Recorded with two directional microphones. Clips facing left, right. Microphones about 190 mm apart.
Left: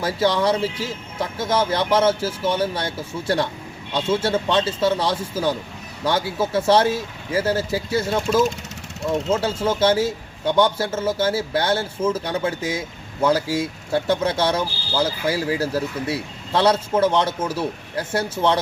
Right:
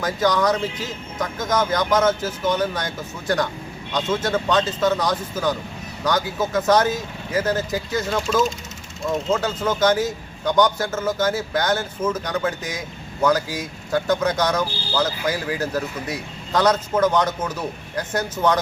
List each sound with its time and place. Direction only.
0.0 s speech: 30° left (ahead or behind)